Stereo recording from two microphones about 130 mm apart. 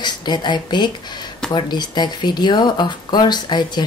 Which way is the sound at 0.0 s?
35° left (ahead or behind).